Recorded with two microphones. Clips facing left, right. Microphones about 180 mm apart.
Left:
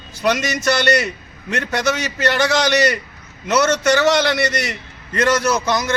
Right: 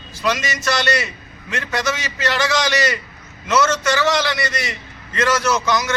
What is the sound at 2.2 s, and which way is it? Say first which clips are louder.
Speech: left 2 dB; 55° left (ahead or behind).